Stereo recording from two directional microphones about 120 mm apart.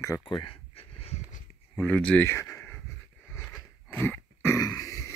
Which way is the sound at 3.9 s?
20° left (ahead or behind).